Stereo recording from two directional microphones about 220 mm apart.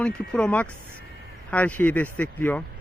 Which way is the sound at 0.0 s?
5° left (ahead or behind).